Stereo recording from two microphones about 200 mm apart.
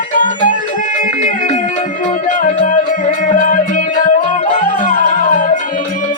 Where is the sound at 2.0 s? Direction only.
40° left (ahead or behind).